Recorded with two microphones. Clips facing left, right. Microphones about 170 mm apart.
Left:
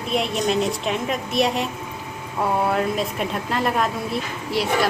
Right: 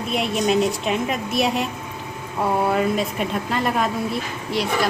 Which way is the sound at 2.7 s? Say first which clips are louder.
Right 2 dB; centre (ahead or behind).